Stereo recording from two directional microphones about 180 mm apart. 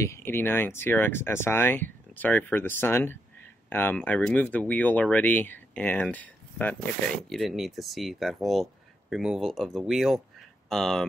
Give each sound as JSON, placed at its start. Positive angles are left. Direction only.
{"t": 0.0, "sound": "speech", "side_deg": 15}